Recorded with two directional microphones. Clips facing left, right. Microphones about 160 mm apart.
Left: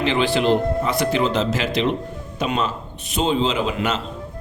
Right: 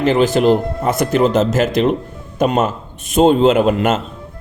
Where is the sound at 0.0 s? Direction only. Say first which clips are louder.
Right 6 dB; 45° right (ahead or behind).